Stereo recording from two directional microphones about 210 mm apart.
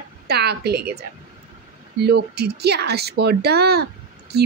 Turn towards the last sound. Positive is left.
turn(degrees=-50)  # may be behind; listen again after turning